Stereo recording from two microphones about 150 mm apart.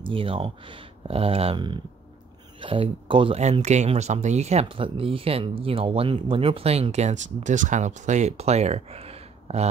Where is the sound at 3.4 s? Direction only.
50° right (ahead or behind).